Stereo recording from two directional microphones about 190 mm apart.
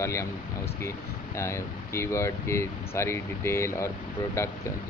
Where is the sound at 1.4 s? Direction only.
15° left (ahead or behind).